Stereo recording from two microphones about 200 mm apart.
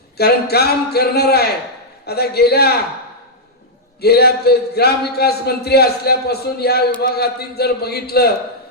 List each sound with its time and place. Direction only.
0.2 s a man's voice: 55° left (ahead or behind)
4.0 s a man's voice: 55° left (ahead or behind)